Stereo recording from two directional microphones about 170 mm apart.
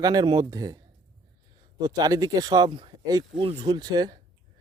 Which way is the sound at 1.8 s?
20° right (ahead or behind).